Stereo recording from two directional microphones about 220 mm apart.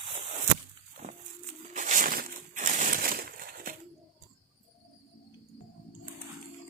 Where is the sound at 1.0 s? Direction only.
30° right (ahead or behind).